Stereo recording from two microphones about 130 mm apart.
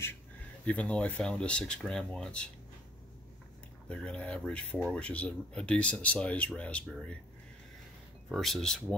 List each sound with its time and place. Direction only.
0.7 s speech: 10° left (ahead or behind)
3.9 s speech: 10° left (ahead or behind)
8.3 s speech: centre (ahead or behind)